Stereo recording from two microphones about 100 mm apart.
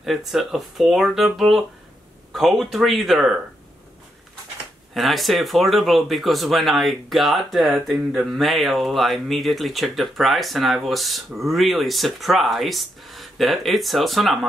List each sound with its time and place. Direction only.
0.0 s speech: centre (ahead or behind)
4.9 s speech: centre (ahead or behind)